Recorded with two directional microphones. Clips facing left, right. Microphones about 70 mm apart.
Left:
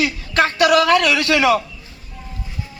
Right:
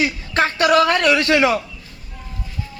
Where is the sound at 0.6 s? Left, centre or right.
Right.